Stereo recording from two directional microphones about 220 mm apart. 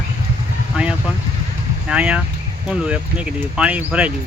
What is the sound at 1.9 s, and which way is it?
Speech, 5° right (ahead or behind).